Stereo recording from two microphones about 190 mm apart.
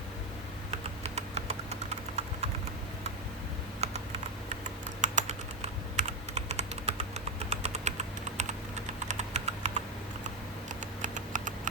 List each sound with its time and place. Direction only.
0.7 s typing: 35° right (ahead or behind)
3.8 s typing: 35° right (ahead or behind)
4.9 s computer keyboard: 40° right (ahead or behind)
7.5 s typing: 35° right (ahead or behind)
11.0 s typing: 40° right (ahead or behind)